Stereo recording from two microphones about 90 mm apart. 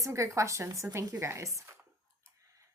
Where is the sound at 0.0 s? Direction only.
35° right (ahead or behind).